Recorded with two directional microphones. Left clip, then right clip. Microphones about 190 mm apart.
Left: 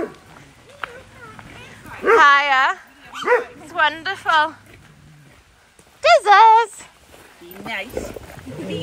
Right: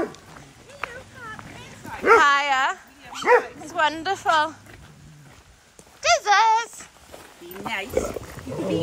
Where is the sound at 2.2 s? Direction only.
15° right (ahead or behind).